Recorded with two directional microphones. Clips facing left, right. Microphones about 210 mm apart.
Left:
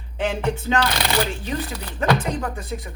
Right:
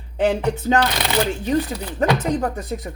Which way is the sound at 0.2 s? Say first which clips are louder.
Right 4 dB; 40° right (ahead or behind).